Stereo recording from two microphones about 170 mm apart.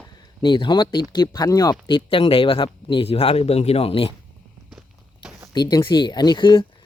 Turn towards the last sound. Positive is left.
turn(degrees=25)  # may be behind; listen again after turning